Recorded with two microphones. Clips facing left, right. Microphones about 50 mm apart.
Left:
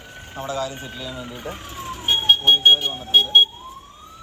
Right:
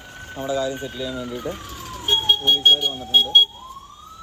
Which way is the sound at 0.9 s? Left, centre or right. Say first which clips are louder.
Right 4 dB; centre.